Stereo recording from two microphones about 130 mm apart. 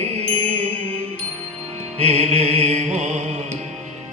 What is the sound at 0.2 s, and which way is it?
Music, 50° right (ahead or behind).